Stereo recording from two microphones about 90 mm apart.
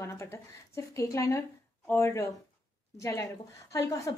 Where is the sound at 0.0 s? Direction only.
30° left (ahead or behind).